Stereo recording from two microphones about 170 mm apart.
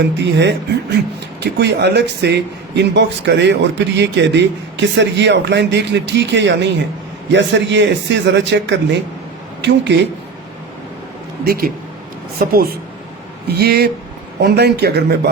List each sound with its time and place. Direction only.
0.2 s speech: 90° right
11.4 s a man's voice: 60° right (ahead or behind)